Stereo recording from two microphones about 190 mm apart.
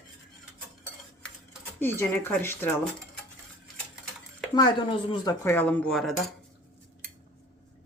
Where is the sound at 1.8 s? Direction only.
10° left (ahead or behind).